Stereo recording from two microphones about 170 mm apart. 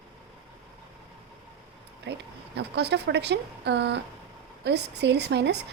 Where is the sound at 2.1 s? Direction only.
90° right.